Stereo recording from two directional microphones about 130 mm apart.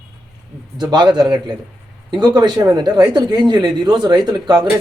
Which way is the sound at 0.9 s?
35° right (ahead or behind).